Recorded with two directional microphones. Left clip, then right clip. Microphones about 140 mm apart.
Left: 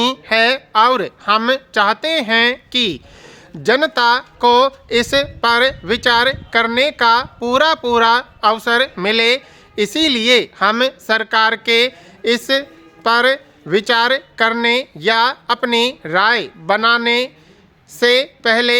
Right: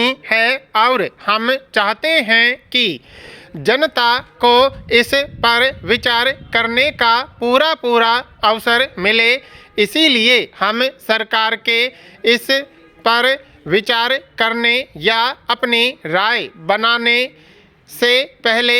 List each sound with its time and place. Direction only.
0.0 s speech: 15° right (ahead or behind)